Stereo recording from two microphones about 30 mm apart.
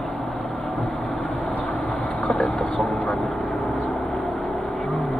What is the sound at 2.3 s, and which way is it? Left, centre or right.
Vehicle, left.